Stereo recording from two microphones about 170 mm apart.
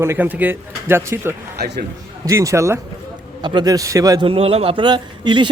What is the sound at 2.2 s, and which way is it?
A man's voice, 20° right (ahead or behind).